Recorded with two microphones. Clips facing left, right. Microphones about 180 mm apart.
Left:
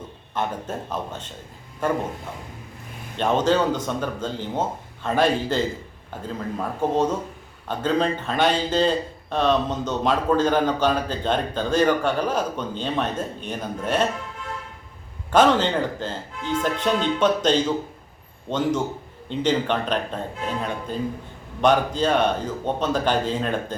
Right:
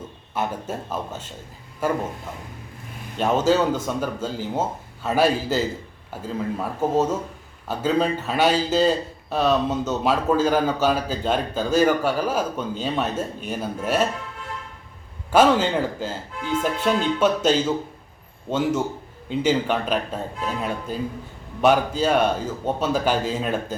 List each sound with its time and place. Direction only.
0.3 s speech: 10° right (ahead or behind)
3.2 s speech: 5° right (ahead or behind)
15.3 s speech: 10° right (ahead or behind)